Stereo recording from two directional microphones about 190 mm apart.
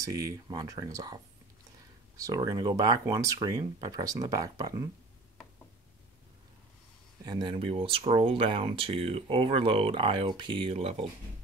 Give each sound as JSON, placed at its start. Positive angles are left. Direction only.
{"t": 0.0, "sound": "speech", "side_deg": -20}
{"t": 7.2, "sound": "speech", "side_deg": -25}